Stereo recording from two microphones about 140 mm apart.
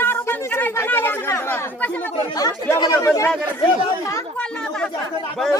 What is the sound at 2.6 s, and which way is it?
Speech, 25° left (ahead or behind).